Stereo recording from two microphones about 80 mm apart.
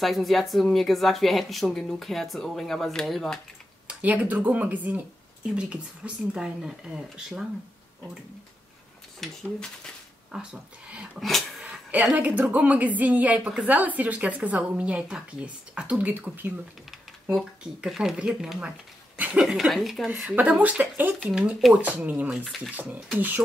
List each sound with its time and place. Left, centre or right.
0.0 s speech: centre
3.8 s a woman's voice: centre
9.2 s speech: centre
10.3 s speech: centre
11.1 s speech: centre
12.2 s a woman's voice: right
17.3 s speech: centre
19.1 s a sound: centre
19.4 s speech: centre
20.1 s a woman's voice: centre